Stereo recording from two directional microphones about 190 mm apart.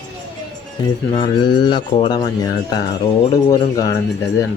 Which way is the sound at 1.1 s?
25° left (ahead or behind).